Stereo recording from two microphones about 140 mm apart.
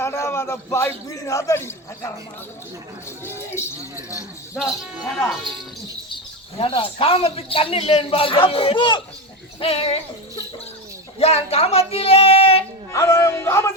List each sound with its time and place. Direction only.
0.0 s a man's voice: 20° left (ahead or behind)
3.6 s speech: 20° left (ahead or behind)
4.5 s cricket: centre (ahead or behind)
6.6 s a man's voice: 40° left (ahead or behind)
9.6 s speech: 45° left (ahead or behind)
11.2 s speech: 45° left (ahead or behind)
12.9 s speech: 20° left (ahead or behind)